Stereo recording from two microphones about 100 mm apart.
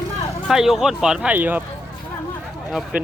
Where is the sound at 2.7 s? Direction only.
10° right (ahead or behind).